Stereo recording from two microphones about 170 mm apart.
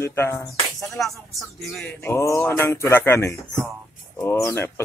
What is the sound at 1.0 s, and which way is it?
Speech, centre (ahead or behind).